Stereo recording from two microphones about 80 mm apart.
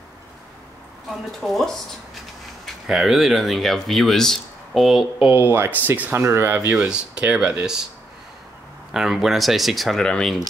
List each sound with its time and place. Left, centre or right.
1.4 s speech: centre
5.3 s speech: right
6.8 s speech: centre
8.9 s speech: centre